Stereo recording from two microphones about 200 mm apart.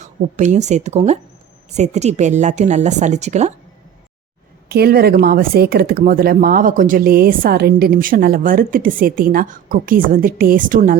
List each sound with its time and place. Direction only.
0.0 s a woman's voice: 35° right (ahead or behind)
4.7 s speech: 50° right (ahead or behind)